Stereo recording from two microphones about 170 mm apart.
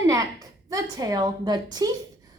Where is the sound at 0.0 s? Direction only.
20° right (ahead or behind).